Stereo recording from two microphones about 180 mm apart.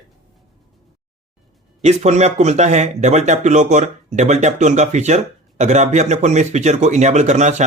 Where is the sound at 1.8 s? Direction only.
40° right (ahead or behind).